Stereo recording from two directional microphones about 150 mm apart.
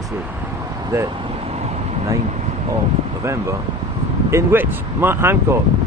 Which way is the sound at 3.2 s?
20° right (ahead or behind).